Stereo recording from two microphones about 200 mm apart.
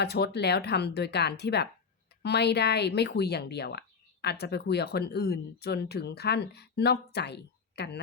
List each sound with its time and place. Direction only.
0.0 s speech: 55° left (ahead or behind)